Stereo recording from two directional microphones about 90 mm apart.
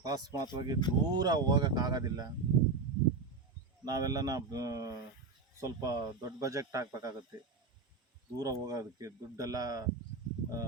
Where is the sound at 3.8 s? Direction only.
45° right (ahead or behind).